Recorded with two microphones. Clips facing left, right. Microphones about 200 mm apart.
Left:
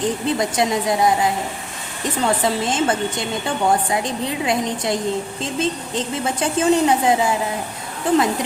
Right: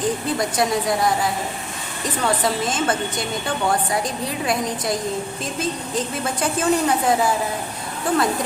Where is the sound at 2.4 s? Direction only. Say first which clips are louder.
Left 2 dB; 25° left (ahead or behind).